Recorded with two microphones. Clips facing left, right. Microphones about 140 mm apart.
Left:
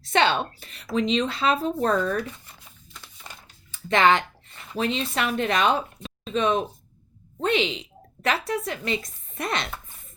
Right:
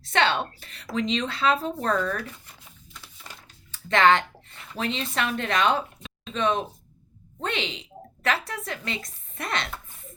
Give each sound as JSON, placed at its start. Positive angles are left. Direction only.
{"t": 0.1, "sound": "a woman's voice", "side_deg": 15}
{"t": 2.9, "sound": "a sound", "side_deg": 0}
{"t": 3.8, "sound": "a woman's voice", "side_deg": 10}